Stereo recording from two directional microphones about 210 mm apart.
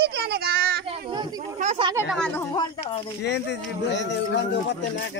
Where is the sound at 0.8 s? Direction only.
25° right (ahead or behind).